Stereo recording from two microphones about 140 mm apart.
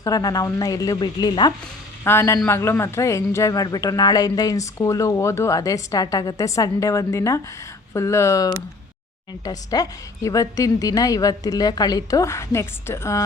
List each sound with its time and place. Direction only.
0.0 s speech: 25° left (ahead or behind)
2.0 s speech: 20° left (ahead or behind)